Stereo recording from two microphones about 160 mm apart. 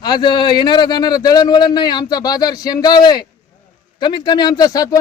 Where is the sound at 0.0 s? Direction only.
25° left (ahead or behind).